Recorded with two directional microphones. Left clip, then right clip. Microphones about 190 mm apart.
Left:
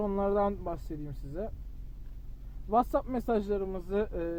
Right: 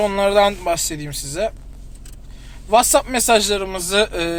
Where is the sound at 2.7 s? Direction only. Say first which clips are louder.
Right 14 dB; 45° left (ahead or behind).